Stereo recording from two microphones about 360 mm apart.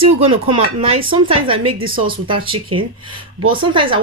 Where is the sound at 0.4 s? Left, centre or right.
Centre.